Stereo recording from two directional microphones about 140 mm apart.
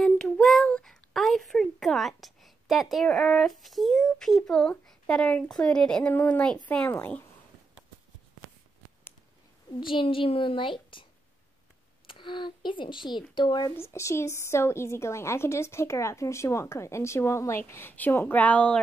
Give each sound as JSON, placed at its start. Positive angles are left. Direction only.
{"t": 0.0, "sound": "speech", "side_deg": 0}
{"t": 9.8, "sound": "speech", "side_deg": 35}
{"t": 12.1, "sound": "speech", "side_deg": 35}
{"t": 13.7, "sound": "a woman's voice", "side_deg": 20}